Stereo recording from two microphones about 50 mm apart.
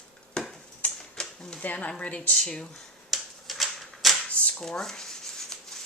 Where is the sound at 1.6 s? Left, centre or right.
Left.